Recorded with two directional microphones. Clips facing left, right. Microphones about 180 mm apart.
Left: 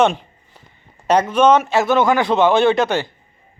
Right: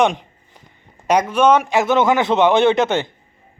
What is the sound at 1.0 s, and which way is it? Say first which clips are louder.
A man's voice: left 1 dB; 10° right (ahead or behind).